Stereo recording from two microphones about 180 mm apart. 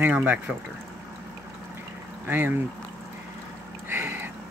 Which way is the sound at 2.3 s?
10° right (ahead or behind).